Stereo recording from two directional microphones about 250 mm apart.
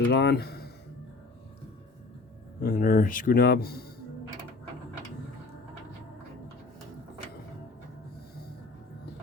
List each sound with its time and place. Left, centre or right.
0.1 s speech: left
2.6 s speech: left